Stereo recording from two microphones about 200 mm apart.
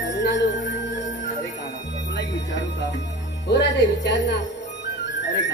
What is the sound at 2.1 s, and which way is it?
Music, 60° left (ahead or behind).